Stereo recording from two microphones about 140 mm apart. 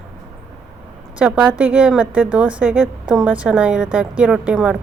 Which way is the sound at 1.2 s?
10° right (ahead or behind).